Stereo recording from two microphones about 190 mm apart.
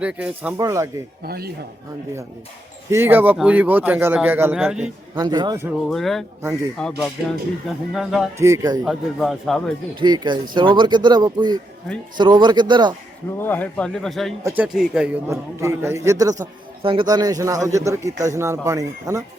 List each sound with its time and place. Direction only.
0.0 s a man's voice: 5° right (ahead or behind)
1.2 s a man's voice: 55° right (ahead or behind)
2.9 s a man's voice: 10° right (ahead or behind)
5.1 s speech: 20° right (ahead or behind)
5.9 s a man's voice: centre (ahead or behind)
8.4 s a man's voice: 15° right (ahead or behind)
8.8 s a man's voice: centre (ahead or behind)
9.9 s speech: 25° right (ahead or behind)
13.4 s a man's voice: 10° left (ahead or behind); by 19.2 s 15° right (ahead or behind)